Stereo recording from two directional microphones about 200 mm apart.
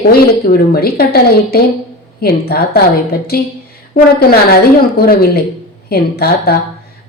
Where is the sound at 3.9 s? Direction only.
45° left (ahead or behind).